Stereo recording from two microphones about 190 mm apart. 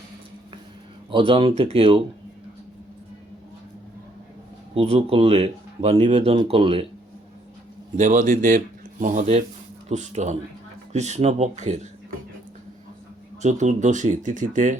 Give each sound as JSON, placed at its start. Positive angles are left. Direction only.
{"t": 1.1, "sound": "speech", "side_deg": -30}
{"t": 4.7, "sound": "speech", "side_deg": -30}
{"t": 7.9, "sound": "speech", "side_deg": -40}
{"t": 13.4, "sound": "speech", "side_deg": -40}